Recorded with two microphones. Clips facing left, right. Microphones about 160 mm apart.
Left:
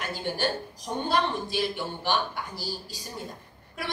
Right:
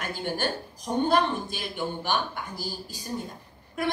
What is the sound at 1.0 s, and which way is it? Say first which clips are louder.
A woman's voice: right 2 dB; 50° right (ahead or behind).